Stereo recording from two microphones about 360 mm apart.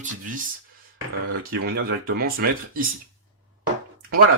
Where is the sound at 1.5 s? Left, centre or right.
Right.